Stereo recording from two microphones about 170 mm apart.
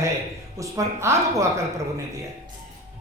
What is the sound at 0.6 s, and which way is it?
Speech, 20° right (ahead or behind).